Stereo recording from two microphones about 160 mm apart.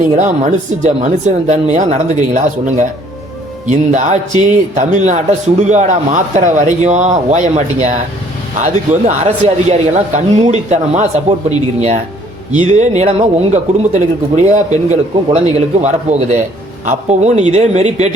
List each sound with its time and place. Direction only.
0.0 s speech: 50° right (ahead or behind)